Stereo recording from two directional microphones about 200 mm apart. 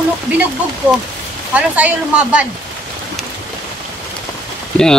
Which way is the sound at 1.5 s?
5° right (ahead or behind).